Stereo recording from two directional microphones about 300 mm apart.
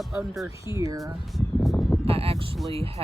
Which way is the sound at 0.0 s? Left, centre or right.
Centre.